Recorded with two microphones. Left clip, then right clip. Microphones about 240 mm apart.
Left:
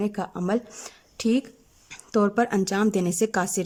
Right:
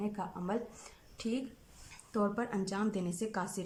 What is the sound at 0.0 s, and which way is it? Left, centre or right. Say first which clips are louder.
Speech: left 10 dB; left.